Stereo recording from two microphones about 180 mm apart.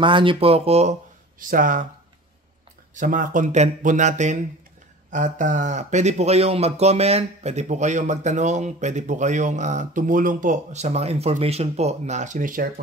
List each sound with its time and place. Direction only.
0.0 s speech: 30° right (ahead or behind)
1.4 s speech: 50° right (ahead or behind)
2.9 s speech: 45° right (ahead or behind)